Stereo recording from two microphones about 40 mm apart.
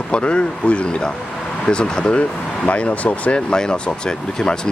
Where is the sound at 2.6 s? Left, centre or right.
Left.